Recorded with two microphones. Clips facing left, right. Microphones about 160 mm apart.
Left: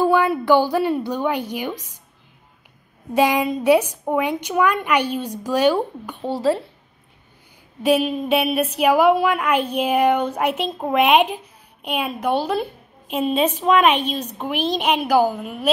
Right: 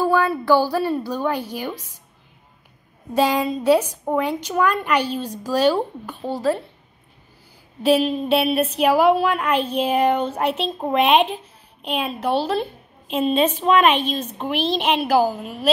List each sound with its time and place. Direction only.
0.0 s a woman's voice: 15° left (ahead or behind)
3.2 s a woman's voice: 15° left (ahead or behind)
6.2 s speech: 25° left (ahead or behind)
7.8 s a woman's voice: 10° left (ahead or behind)